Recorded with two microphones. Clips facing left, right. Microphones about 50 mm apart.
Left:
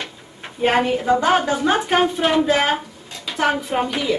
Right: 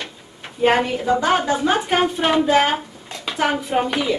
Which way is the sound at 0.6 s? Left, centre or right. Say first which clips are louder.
Even; centre.